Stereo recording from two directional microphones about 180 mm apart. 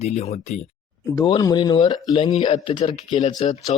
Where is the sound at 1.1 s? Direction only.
20° left (ahead or behind).